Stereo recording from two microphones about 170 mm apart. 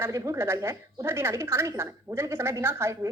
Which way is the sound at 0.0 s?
20° right (ahead or behind).